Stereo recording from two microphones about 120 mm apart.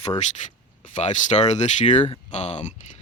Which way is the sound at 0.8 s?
85° left.